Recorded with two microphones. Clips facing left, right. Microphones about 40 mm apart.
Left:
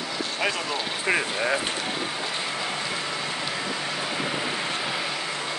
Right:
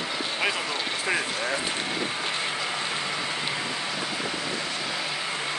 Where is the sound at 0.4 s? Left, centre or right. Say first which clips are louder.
Left 1 dB; centre.